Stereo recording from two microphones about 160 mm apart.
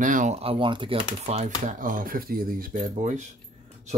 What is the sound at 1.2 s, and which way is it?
Speech, 45° right (ahead or behind).